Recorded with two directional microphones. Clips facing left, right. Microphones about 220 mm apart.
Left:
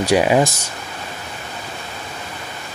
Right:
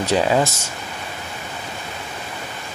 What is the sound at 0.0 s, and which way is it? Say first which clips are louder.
Speech: left 3 dB; 15° left (ahead or behind).